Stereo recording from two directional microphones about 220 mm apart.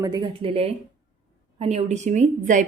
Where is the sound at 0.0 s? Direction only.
20° right (ahead or behind).